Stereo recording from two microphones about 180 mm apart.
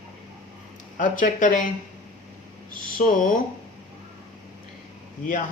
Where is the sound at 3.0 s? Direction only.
50° left (ahead or behind).